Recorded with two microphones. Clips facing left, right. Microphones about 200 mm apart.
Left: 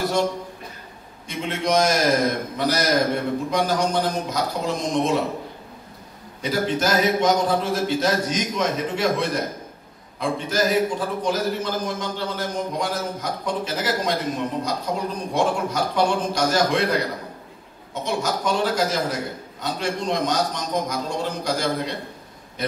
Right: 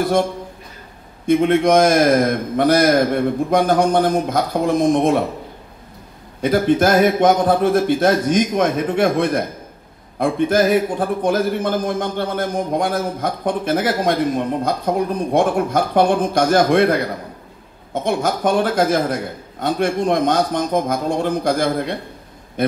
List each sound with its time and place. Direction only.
1.2 s a man's voice: 55° right (ahead or behind)
6.4 s a man's voice: 55° right (ahead or behind)